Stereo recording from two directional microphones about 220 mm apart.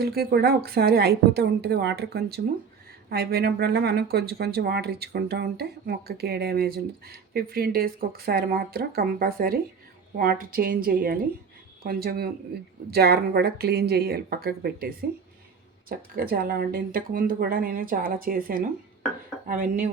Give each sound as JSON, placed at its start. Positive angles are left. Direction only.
{"t": 0.0, "sound": "speech", "side_deg": -45}